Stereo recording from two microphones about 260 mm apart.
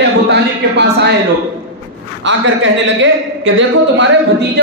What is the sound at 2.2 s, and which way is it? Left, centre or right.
A man's voice, right.